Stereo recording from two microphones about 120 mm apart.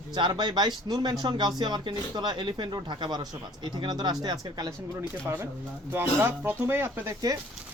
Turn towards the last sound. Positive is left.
turn(degrees=-20)  # may be behind; listen again after turning